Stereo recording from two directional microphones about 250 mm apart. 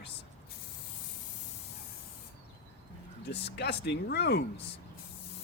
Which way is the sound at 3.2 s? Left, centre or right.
Left.